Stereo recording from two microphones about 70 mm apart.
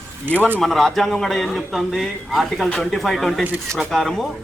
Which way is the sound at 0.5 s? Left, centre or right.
Centre.